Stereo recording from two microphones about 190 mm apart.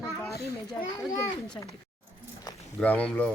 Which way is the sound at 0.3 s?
15° left (ahead or behind).